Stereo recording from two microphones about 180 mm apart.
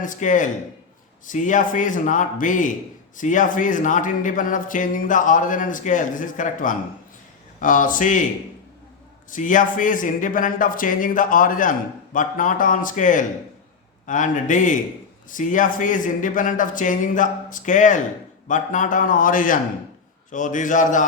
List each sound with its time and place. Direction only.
0.0 s speech: 45° left (ahead or behind)
9.3 s speech: 45° left (ahead or behind)